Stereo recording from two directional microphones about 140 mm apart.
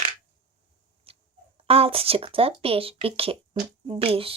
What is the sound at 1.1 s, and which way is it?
Chicken, 40° right (ahead or behind).